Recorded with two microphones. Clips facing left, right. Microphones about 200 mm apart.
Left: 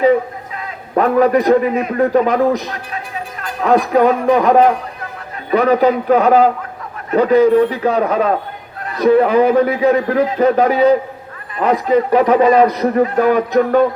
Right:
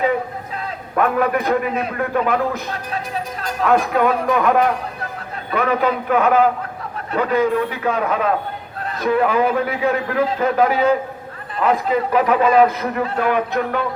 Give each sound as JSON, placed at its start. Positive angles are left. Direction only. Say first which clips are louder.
{"t": 0.9, "sound": "a man's voice", "louder": "left 6 dB", "side_deg": 35}
{"t": 3.6, "sound": "a man's voice", "louder": "left 4 dB", "side_deg": 40}